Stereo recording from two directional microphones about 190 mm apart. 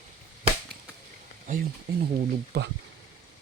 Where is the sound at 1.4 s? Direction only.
50° right (ahead or behind).